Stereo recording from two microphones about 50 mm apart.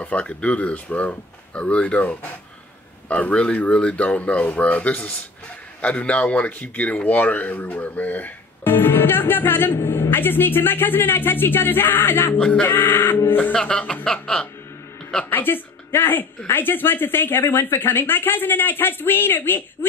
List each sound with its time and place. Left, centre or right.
0.0 s speech: left
8.6 s speech: left
12.4 s speech: left
12.6 s speech: left
13.6 s speech: centre
15.2 s a woman's voice: left